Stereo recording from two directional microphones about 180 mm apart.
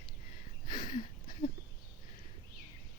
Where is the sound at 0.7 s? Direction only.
50° left (ahead or behind).